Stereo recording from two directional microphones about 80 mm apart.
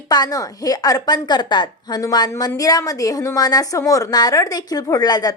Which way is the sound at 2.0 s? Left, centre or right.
Left.